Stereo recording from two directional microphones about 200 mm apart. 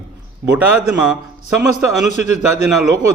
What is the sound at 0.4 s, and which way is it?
Speech, 5° right (ahead or behind).